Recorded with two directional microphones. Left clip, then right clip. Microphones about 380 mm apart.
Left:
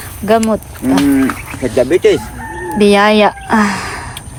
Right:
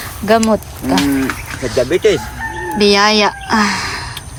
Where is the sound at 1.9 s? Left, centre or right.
Left.